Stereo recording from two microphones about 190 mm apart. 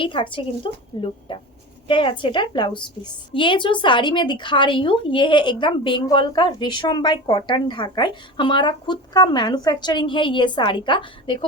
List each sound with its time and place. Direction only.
0.0 s a woman's voice: 25° left (ahead or behind)